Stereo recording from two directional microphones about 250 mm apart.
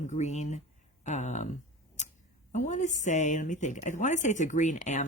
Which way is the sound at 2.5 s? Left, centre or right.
Left.